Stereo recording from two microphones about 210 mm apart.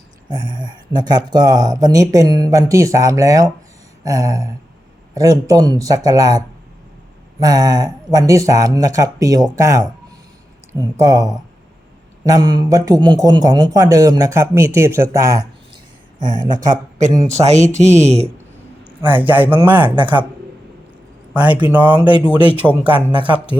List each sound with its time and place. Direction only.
0.3 s speech: 20° right (ahead or behind)
17.2 s speech: 35° right (ahead or behind)
18.9 s speech: 10° right (ahead or behind)
21.3 s speech: 5° right (ahead or behind)